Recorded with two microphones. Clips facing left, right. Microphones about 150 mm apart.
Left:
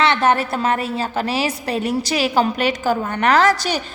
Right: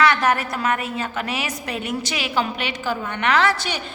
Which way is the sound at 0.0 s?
25° left (ahead or behind).